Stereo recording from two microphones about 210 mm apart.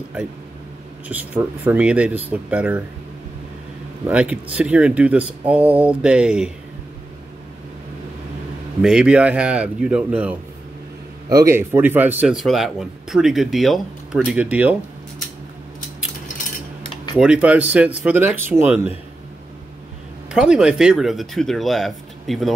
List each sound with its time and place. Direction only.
1.0 s speech: 10° right (ahead or behind)
4.1 s speech: 5° right (ahead or behind)
8.8 s speech: 5° right (ahead or behind)
16.8 s cutlery: 20° left (ahead or behind)
17.2 s speech: 5° right (ahead or behind)
20.2 s speech: 5° right (ahead or behind)